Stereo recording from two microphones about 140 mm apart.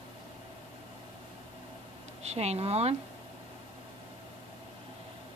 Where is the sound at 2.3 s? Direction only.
50° right (ahead or behind).